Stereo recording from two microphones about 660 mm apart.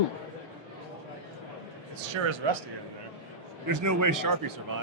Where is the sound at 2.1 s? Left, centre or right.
Right.